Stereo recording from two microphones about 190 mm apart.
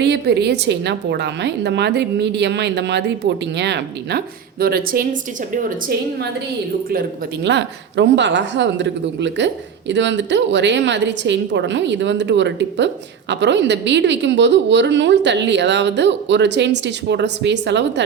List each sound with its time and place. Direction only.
0.0 s a woman's voice: 60° right (ahead or behind)
4.6 s speech: 50° right (ahead or behind)
7.4 s a woman's voice: 70° right (ahead or behind)